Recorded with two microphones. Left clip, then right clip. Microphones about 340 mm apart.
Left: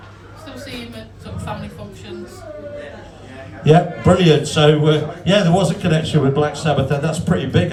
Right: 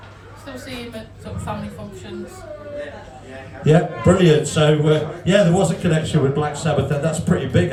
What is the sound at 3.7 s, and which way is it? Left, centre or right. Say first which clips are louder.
A man's voice: left 3 dB; centre.